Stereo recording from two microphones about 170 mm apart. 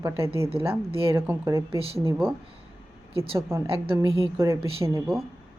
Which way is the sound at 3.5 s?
15° right (ahead or behind).